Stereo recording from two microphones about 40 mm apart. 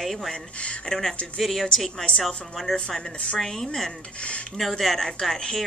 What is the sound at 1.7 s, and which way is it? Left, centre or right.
Speech, centre.